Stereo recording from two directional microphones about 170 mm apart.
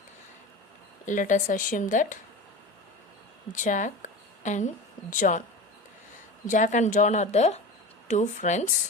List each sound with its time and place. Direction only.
1.0 s speech: 50° left (ahead or behind)
3.5 s a woman's voice: 50° left (ahead or behind)
6.5 s speech: 45° left (ahead or behind)